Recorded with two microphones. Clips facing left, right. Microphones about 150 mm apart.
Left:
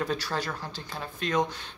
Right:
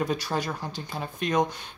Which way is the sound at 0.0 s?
15° right (ahead or behind).